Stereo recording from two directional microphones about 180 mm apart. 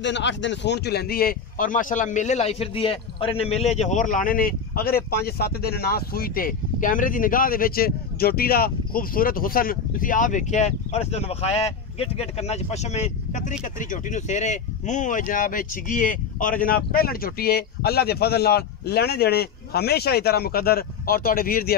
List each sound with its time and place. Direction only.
0.0 s speech: 80° left; by 21.7 s 55° left (ahead or behind)